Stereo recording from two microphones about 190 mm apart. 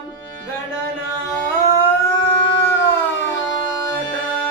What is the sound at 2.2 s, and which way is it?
Howl, 70° left (ahead or behind).